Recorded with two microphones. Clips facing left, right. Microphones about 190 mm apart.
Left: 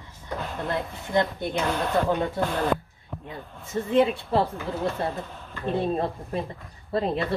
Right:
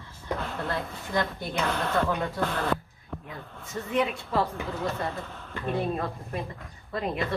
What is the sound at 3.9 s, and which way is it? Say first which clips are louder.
A woman's voice: left 6 dB; 30° left (ahead or behind).